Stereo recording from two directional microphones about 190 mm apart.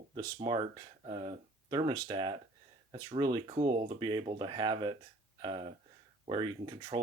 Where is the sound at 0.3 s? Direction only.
25° right (ahead or behind).